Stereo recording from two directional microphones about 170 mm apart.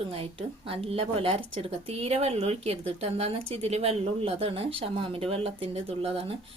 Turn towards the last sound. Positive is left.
turn(degrees=-35)  # may be behind; listen again after turning